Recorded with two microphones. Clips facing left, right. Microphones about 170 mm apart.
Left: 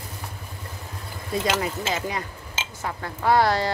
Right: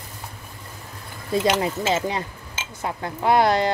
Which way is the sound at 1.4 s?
25° right (ahead or behind).